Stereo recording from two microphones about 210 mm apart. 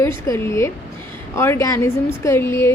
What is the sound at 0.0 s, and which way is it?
A woman's voice, 10° left (ahead or behind).